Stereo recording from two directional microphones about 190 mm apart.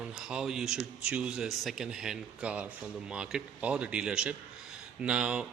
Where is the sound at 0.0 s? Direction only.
5° right (ahead or behind).